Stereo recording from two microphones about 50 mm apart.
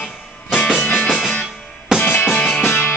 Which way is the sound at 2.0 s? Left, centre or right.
Left.